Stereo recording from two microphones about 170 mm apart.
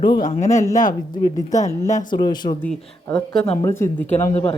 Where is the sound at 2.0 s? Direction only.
25° left (ahead or behind).